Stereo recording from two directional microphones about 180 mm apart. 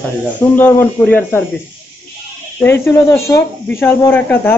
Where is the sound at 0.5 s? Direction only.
10° left (ahead or behind).